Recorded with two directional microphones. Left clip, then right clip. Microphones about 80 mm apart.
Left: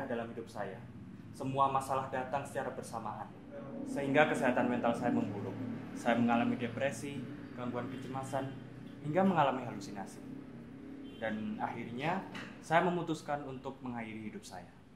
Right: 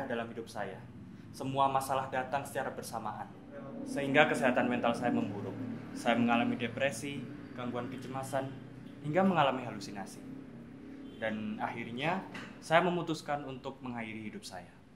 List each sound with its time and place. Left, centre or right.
0.1 s a man's voice: right
11.1 s a man's voice: right